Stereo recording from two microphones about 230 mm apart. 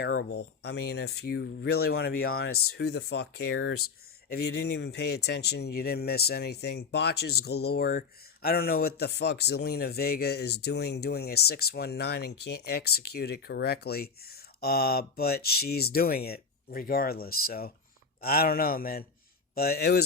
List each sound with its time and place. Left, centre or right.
0.0 s speech: left